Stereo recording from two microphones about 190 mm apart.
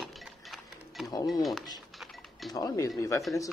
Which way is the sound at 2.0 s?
Centre (ahead or behind).